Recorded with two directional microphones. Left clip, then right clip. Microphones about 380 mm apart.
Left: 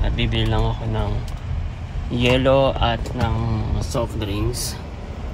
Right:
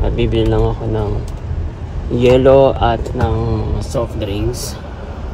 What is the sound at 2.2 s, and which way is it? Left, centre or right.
Speech, centre.